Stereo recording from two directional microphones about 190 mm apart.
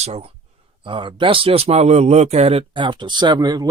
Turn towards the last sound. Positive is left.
turn(degrees=-20)  # may be behind; listen again after turning